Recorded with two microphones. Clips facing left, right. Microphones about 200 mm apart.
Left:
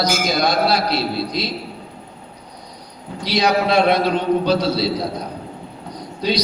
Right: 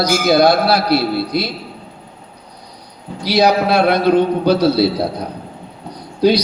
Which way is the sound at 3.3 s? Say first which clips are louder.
Right 4 dB; 65° right (ahead or behind).